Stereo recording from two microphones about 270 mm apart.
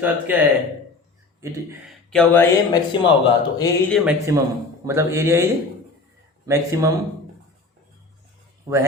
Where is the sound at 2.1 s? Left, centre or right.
Centre.